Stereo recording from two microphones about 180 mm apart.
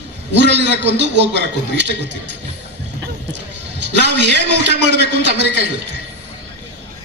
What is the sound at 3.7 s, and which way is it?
A man's voice, 75° right (ahead or behind).